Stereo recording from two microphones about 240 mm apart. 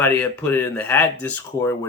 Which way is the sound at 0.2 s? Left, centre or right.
Centre.